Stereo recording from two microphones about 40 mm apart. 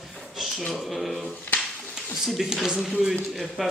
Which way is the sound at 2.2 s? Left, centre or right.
Centre.